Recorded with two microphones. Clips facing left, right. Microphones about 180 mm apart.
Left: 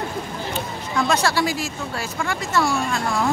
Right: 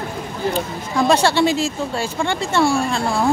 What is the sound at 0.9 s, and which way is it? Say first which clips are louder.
Speech: right 5 dB; 30° right (ahead or behind).